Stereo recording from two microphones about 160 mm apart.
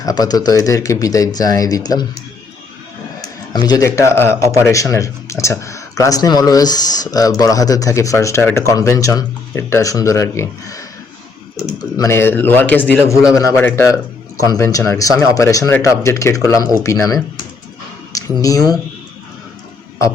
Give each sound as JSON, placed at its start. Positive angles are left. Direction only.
{"t": 0.0, "sound": "speech", "side_deg": 25}
{"t": 3.5, "sound": "a man's voice", "side_deg": 25}
{"t": 18.4, "sound": "speech", "side_deg": 20}